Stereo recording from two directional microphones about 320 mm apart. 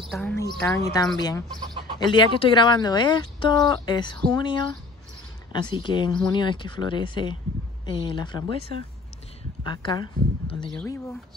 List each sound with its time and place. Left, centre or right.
0.1 s speech: centre
9.6 s speech: centre
10.7 s speech: centre